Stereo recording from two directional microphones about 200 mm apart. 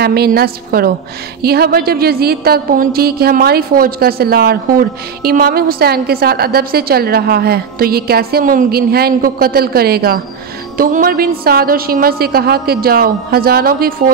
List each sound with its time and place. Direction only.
0.0 s a woman's voice: 50° right (ahead or behind)